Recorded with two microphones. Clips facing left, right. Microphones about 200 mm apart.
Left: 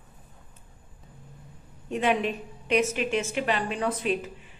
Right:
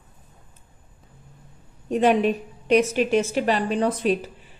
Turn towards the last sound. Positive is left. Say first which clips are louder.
# right 5 dB
turn(degrees=-35)  # may be behind; listen again after turning